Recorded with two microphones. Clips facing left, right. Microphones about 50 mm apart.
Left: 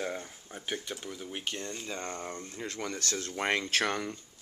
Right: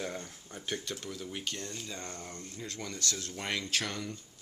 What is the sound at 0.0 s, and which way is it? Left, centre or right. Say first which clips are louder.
Speech: left 3 dB; centre.